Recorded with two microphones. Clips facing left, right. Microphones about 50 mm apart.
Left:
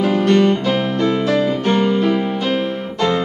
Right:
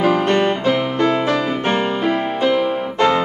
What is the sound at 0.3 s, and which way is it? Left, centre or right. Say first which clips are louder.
Music: left 2 dB; right.